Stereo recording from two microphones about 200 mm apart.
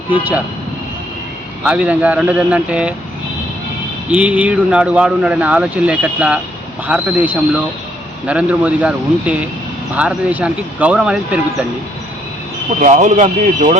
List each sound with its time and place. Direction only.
0.1 s speech: 10° right (ahead or behind)
1.6 s speech: 5° right (ahead or behind)
4.1 s speech: 5° right (ahead or behind)
12.8 s speech: 35° right (ahead or behind)